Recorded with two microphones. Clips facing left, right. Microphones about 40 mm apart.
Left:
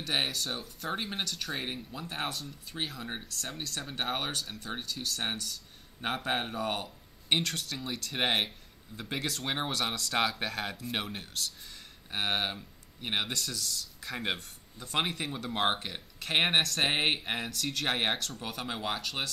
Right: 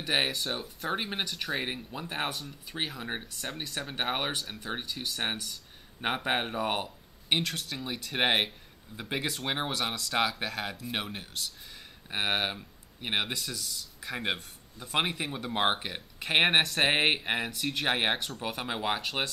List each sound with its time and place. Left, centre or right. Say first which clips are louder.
0.0 s speech: right 3 dB; centre
7.2 s speech: even; centre; by 19.3 s right